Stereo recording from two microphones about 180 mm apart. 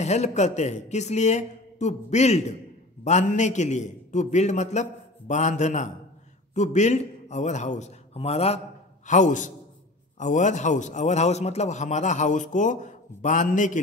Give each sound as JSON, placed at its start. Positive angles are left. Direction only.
{"t": 0.0, "sound": "a man's voice", "side_deg": 40}